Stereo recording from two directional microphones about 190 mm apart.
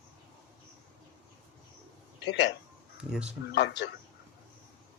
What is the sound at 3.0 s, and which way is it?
Speech, 5° right (ahead or behind).